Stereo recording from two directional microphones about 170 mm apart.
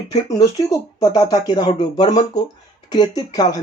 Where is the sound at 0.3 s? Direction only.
20° left (ahead or behind).